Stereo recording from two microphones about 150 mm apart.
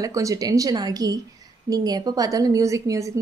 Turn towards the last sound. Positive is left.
turn(degrees=-20)  # may be behind; listen again after turning